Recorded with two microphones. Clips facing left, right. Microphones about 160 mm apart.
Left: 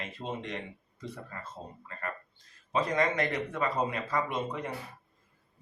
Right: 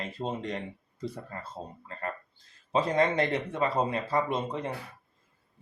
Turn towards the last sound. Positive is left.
turn(degrees=-30)  # may be behind; listen again after turning